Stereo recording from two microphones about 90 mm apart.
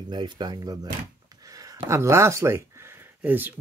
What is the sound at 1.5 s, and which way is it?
Speech, 40° right (ahead or behind).